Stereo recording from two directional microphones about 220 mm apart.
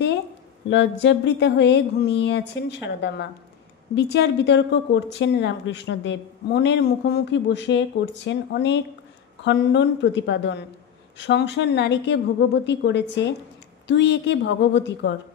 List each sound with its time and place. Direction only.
0.7 s speech: 55° left (ahead or behind)